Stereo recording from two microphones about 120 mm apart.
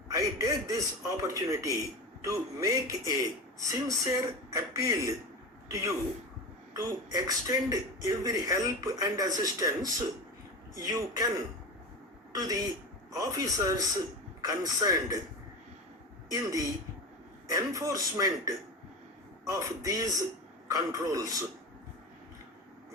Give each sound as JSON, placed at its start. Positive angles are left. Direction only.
{"t": 0.1, "sound": "a man's voice", "side_deg": -30}
{"t": 16.3, "sound": "speech", "side_deg": -30}